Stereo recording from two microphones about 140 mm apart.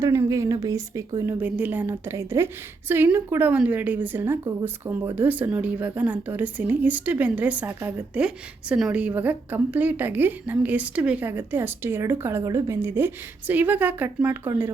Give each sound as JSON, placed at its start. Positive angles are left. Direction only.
{"t": 0.0, "sound": "speech", "side_deg": -20}
{"t": 1.4, "sound": "a woman's voice", "side_deg": -10}